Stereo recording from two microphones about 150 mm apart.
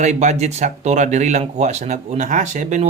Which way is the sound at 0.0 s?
50° right (ahead or behind).